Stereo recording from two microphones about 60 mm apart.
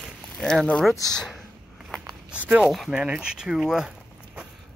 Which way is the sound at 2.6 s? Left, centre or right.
Centre.